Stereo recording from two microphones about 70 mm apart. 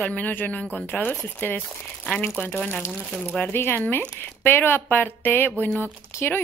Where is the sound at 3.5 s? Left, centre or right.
Left.